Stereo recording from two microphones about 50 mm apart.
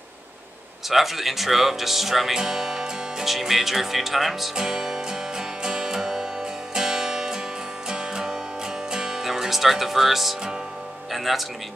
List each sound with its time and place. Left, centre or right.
0.8 s speech: centre
6.7 s music: centre